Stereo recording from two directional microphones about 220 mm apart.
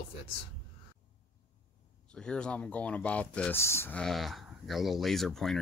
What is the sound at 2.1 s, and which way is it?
Speech, 5° left (ahead or behind).